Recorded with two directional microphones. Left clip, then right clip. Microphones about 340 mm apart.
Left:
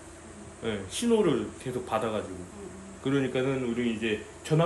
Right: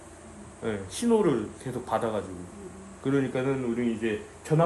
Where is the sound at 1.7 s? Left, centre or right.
Centre.